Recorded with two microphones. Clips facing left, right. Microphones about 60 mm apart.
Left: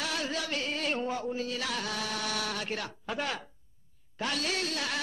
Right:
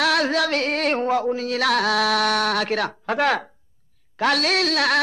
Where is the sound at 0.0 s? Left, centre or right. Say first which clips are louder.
Right 14 dB; right.